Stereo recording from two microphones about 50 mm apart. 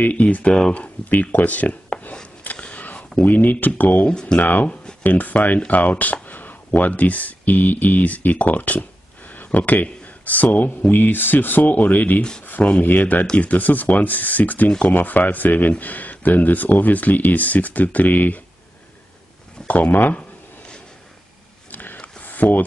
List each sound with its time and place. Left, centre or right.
0.0 s speech: left
2.4 s a sound: left
3.2 s speech: left
4.1 s speech: centre
4.4 s speech: left
12.2 s speech: centre
12.4 s speech: left
19.7 s speech: left
20.2 s a sound: centre
22.2 s a sound: left